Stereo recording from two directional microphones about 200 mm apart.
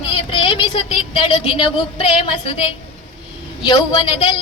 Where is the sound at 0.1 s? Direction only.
25° left (ahead or behind).